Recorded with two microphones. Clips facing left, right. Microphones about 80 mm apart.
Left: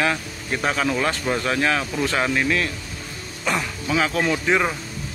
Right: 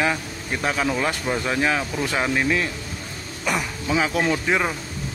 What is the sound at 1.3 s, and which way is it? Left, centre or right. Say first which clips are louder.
Mantra: even; centre.